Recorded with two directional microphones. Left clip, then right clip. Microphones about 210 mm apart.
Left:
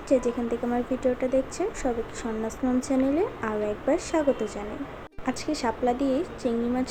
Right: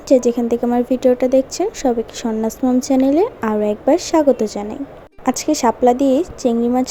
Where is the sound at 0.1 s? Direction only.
35° right (ahead or behind).